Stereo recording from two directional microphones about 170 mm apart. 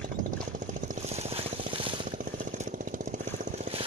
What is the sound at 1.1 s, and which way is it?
Vehicle, 35° right (ahead or behind).